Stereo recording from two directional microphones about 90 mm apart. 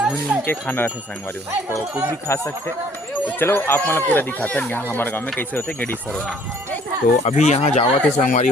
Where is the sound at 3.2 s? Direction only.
25° left (ahead or behind).